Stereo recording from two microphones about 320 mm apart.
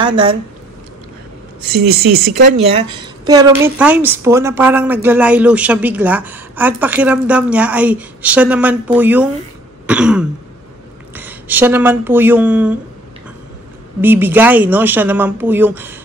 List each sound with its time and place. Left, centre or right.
0.0 s speech: centre
1.8 s speech: right
2.5 s a woman's voice: centre
14.0 s a woman's voice: centre